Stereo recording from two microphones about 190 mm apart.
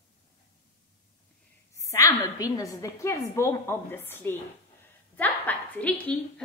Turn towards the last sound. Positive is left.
turn(degrees=10)  # may be behind; listen again after turning